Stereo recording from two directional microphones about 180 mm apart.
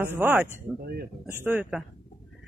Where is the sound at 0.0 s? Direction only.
10° right (ahead or behind).